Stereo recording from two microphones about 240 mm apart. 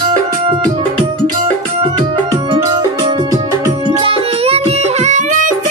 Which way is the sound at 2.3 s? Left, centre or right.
Centre.